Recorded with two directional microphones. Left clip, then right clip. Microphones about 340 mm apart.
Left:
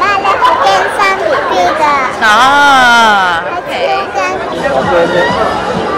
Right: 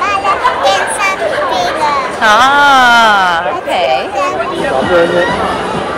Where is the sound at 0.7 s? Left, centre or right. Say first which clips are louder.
Left 2 dB; left.